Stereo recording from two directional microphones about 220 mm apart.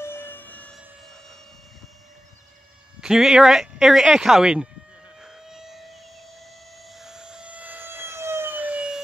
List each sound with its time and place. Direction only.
0.0 s siren: 10° left (ahead or behind)
3.0 s speech: centre (ahead or behind)
5.2 s civil defense siren: centre (ahead or behind)
6.9 s siren: centre (ahead or behind)